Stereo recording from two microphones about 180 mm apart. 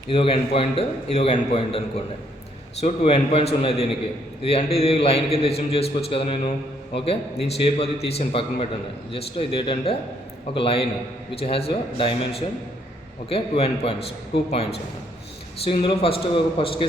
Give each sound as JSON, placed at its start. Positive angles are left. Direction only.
{"t": 0.1, "sound": "a man's voice", "side_deg": 30}
{"t": 2.8, "sound": "a man's voice", "side_deg": 30}
{"t": 15.6, "sound": "a man's voice", "side_deg": 30}